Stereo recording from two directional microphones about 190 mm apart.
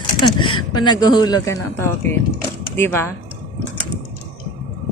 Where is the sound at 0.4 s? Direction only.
25° left (ahead or behind).